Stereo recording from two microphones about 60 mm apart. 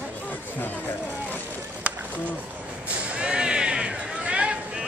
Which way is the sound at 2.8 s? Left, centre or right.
Right.